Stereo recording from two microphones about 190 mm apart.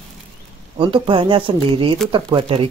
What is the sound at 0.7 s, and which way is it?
Speech, 25° right (ahead or behind).